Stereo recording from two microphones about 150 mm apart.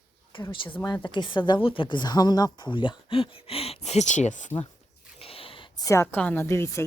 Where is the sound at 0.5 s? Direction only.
35° left (ahead or behind); by 4.5 s 55° left (ahead or behind).